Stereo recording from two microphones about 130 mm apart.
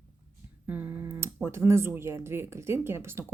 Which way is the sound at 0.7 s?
15° right (ahead or behind).